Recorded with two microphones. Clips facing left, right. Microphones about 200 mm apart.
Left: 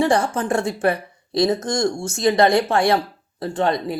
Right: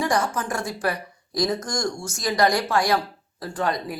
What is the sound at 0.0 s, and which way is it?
Speech, 25° left (ahead or behind).